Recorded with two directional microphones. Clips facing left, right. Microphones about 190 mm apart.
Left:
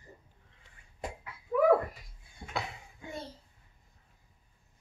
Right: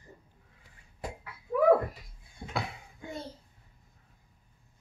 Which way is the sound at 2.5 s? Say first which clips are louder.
Right 2 dB; centre (ahead or behind).